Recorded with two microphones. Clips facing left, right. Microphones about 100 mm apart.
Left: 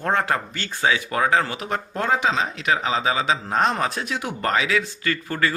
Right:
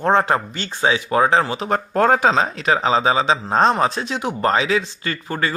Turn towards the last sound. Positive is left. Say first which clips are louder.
# even
turn(degrees=-20)  # may be behind; listen again after turning